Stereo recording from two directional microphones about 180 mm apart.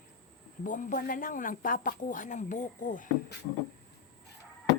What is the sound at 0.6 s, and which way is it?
Speech, 45° left (ahead or behind).